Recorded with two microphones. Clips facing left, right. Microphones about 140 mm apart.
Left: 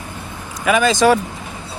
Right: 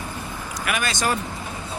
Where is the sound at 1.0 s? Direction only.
90° left.